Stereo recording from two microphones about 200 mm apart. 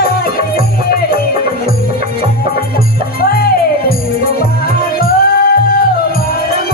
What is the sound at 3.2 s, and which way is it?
Music, 50° left (ahead or behind).